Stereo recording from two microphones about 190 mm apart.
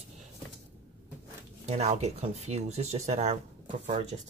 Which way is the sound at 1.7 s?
35° right (ahead or behind).